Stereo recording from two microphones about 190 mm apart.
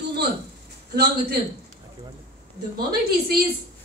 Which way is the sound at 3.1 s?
50° right (ahead or behind).